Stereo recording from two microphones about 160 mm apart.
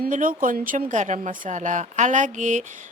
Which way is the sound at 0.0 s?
60° right (ahead or behind).